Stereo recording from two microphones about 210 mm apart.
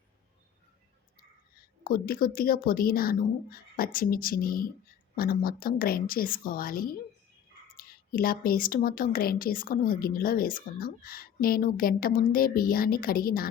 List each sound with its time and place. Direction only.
1.8 s a woman's voice: 45° left (ahead or behind)